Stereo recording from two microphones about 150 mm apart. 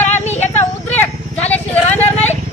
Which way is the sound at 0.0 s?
15° left (ahead or behind).